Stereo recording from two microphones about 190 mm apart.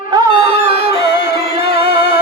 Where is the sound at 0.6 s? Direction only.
60° left (ahead or behind).